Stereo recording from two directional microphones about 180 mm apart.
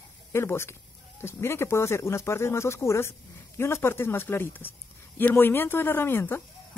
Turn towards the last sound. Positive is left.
turn(degrees=15)  # may be behind; listen again after turning